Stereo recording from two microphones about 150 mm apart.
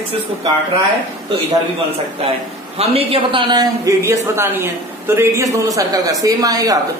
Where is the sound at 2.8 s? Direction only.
40° right (ahead or behind).